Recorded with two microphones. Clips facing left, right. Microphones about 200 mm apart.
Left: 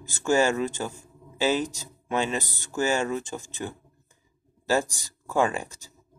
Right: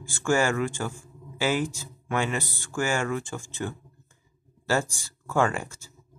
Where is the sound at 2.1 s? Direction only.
20° left (ahead or behind).